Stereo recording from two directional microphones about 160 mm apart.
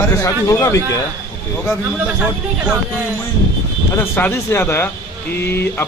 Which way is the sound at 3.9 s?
15° left (ahead or behind).